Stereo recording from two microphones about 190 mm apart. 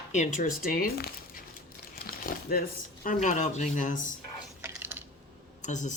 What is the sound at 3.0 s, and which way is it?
Speech, 40° left (ahead or behind).